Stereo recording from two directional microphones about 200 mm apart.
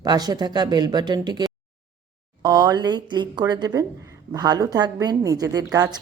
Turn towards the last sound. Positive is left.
turn(degrees=-20)  # may be behind; listen again after turning